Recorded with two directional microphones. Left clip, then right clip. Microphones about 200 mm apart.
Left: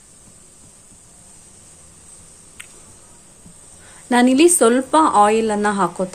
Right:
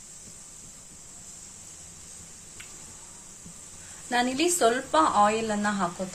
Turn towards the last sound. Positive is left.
turn(degrees=50)  # may be behind; listen again after turning